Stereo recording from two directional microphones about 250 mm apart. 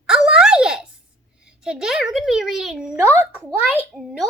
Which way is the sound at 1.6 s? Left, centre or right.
Centre.